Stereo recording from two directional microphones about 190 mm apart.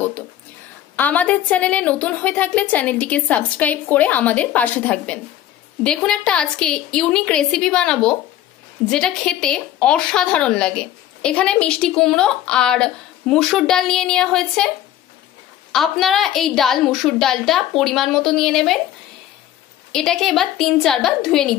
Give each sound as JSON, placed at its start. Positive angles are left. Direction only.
{"t": 0.9, "sound": "a woman's voice", "side_deg": 10}
{"t": 15.7, "sound": "a woman's voice", "side_deg": 0}
{"t": 19.9, "sound": "a woman's voice", "side_deg": 0}